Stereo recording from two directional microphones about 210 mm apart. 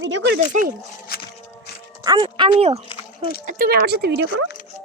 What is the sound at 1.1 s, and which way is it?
Walk, 45° left (ahead or behind).